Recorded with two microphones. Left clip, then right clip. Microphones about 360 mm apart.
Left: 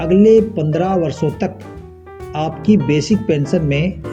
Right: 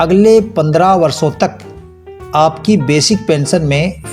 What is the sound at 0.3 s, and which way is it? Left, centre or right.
Speech, right.